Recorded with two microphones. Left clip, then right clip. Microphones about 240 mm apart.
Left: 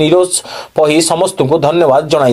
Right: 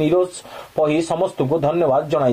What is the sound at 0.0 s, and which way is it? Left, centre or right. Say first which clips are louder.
A man's voice: left 8 dB; left.